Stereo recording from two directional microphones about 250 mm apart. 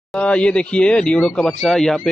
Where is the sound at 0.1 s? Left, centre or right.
Centre.